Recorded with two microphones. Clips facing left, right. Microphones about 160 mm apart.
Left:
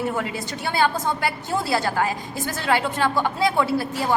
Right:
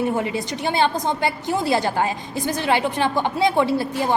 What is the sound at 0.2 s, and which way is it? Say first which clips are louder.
A woman's voice: right 4 dB; 20° right (ahead or behind).